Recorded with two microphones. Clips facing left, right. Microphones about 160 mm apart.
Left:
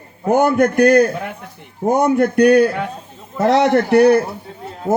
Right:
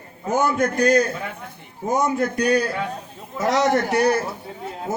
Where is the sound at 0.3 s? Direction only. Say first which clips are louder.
Left 7 dB; 60° left (ahead or behind).